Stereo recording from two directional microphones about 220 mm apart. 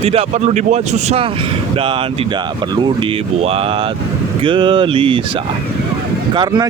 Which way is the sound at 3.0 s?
25° right (ahead or behind).